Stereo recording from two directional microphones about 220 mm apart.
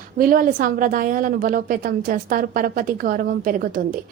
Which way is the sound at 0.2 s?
40° right (ahead or behind).